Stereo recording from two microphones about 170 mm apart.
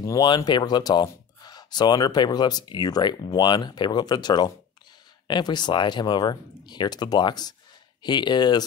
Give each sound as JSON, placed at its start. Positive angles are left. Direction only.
{"t": 0.0, "sound": "speech", "side_deg": 25}